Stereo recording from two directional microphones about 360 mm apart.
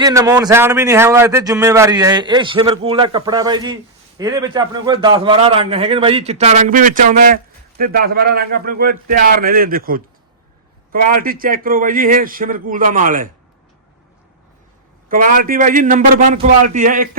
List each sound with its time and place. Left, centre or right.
0.0 s a man's voice: centre
15.1 s a man's voice: right